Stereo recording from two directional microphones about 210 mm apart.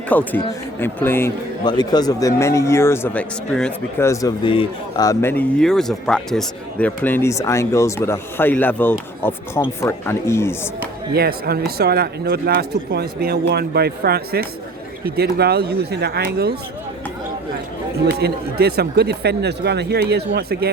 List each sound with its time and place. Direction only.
0.1 s speech: 10° left (ahead or behind)
11.1 s speech: 45° right (ahead or behind)
18.2 s speech: 50° right (ahead or behind)